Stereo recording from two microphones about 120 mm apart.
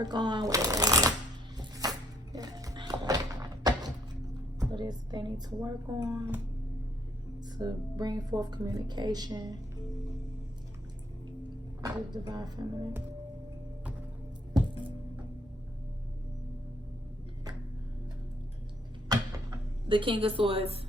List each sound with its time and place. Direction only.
0.0 s speech: 35° right (ahead or behind)
1.5 s music: 30° right (ahead or behind)
4.6 s a woman's voice: 35° right (ahead or behind)
7.5 s a woman's voice: 35° right (ahead or behind)
11.8 s a woman's voice: 35° right (ahead or behind)
14.5 s music: 35° right (ahead or behind)
19.0 s a sound: 35° right (ahead or behind)
20.0 s a woman's voice: 45° right (ahead or behind)